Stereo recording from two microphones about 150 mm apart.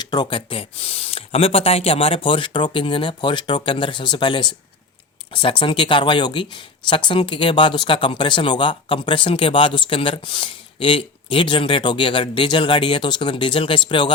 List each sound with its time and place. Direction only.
0.0 s speech: 30° left (ahead or behind)